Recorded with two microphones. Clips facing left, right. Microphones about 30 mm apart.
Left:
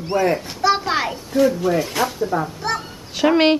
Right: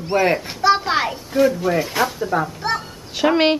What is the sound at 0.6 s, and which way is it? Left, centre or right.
A child's voice, centre.